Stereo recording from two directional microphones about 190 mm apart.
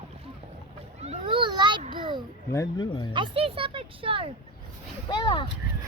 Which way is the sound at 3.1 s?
25° right (ahead or behind).